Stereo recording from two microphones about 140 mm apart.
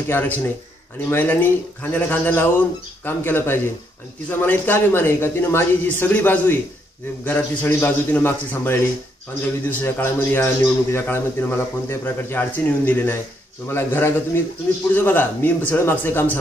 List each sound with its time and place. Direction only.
0.1 s a man's voice: 15° left (ahead or behind)